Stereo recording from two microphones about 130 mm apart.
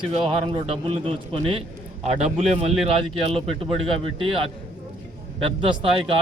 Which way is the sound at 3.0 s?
50° right (ahead or behind).